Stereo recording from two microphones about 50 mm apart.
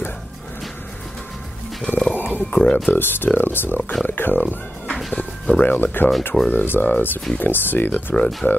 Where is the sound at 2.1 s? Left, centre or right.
Left.